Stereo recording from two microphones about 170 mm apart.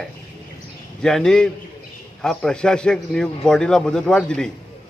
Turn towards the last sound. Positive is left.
turn(degrees=5)  # may be behind; listen again after turning